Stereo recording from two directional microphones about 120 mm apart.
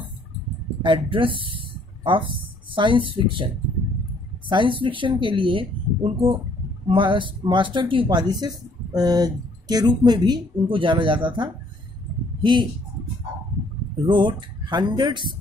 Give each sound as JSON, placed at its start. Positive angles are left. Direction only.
{"t": 0.8, "sound": "speech", "side_deg": -45}
{"t": 4.5, "sound": "speech", "side_deg": -40}
{"t": 14.0, "sound": "speech", "side_deg": -40}